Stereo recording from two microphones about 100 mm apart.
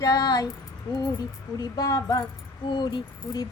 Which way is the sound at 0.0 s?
35° left (ahead or behind).